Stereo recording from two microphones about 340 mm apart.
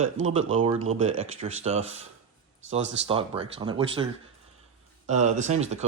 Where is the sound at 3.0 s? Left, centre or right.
Centre.